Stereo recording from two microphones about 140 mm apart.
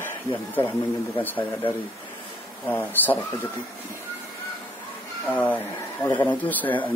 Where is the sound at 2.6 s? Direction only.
10° left (ahead or behind).